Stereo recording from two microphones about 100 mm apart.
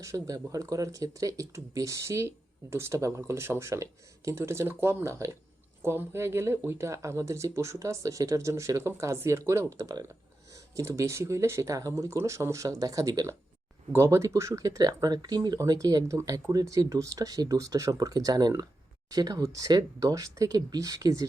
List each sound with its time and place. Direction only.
0.0 s speech: 35° right (ahead or behind)